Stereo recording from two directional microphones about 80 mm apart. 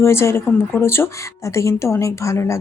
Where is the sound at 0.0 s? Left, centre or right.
Left.